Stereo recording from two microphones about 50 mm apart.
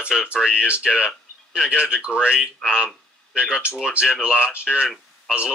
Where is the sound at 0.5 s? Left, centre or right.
Right.